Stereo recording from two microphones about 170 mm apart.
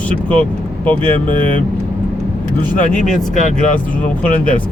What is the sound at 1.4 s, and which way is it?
Speech, 50° left (ahead or behind).